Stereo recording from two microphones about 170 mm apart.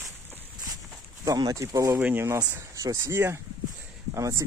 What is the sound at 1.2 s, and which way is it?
Speech, 20° right (ahead or behind).